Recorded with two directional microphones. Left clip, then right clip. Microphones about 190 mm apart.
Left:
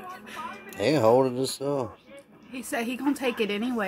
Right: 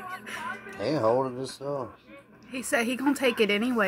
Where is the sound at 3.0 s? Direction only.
15° right (ahead or behind).